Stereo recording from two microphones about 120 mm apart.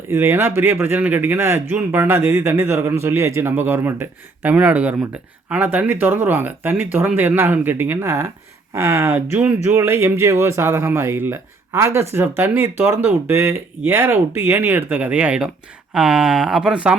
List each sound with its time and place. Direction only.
0.1 s speech: 20° right (ahead or behind)